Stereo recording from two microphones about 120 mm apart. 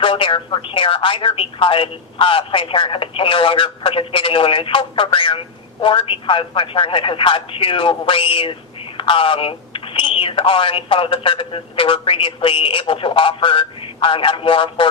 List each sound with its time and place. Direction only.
0.0 s speech: 45° left (ahead or behind)